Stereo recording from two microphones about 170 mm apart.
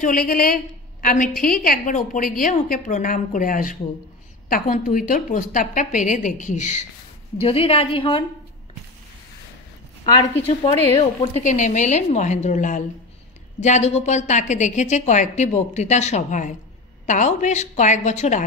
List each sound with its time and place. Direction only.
0.0 s a woman's voice: 60° left (ahead or behind)
7.3 s a woman's voice: 35° left (ahead or behind)
10.1 s a woman's voice: 20° left (ahead or behind)
11.0 s a woman's voice: 40° left (ahead or behind)